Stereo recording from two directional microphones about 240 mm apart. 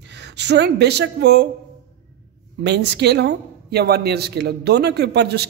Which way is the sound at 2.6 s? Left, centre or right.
Right.